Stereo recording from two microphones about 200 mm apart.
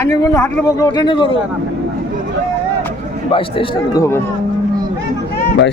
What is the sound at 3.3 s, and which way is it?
Speech, 25° left (ahead or behind).